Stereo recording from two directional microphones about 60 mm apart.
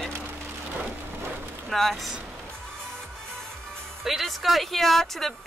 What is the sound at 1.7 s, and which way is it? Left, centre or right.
Speech, centre.